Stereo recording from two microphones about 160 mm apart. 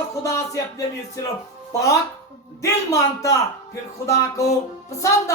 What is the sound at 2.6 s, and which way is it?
A man's voice, 20° left (ahead or behind).